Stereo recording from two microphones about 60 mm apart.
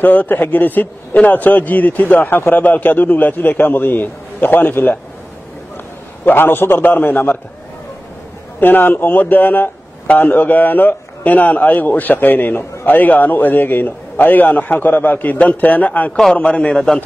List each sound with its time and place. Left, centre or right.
0.0 s a man's voice: left
6.2 s a man's voice: left
8.5 s a man's voice: left; by 17.0 s centre